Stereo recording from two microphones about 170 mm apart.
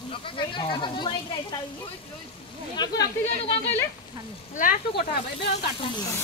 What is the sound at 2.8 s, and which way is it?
Speech, 25° left (ahead or behind).